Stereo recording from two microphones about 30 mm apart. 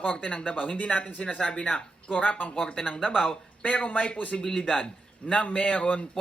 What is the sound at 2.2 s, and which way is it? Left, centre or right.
Speech, left.